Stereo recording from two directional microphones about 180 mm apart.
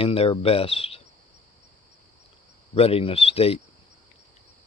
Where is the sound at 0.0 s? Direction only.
30° left (ahead or behind).